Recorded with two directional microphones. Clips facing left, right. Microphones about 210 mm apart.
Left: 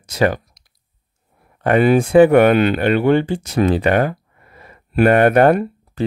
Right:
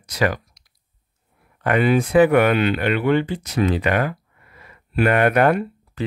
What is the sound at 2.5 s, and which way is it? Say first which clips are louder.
Speech: left 5 dB; 45° left (ahead or behind).